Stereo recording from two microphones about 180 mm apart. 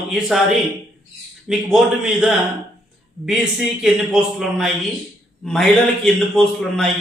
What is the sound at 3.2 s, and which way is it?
A man's voice, 5° right (ahead or behind).